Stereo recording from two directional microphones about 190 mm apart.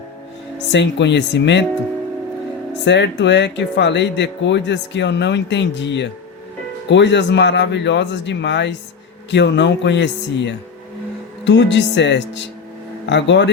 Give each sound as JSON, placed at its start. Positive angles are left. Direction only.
{"t": 0.7, "sound": "speech", "side_deg": 70}
{"t": 2.8, "sound": "speech", "side_deg": 65}